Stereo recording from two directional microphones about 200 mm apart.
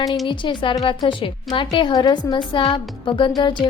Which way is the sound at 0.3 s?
25° left (ahead or behind).